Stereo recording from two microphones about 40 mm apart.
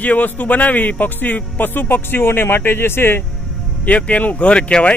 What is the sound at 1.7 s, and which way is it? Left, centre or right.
Speech, left.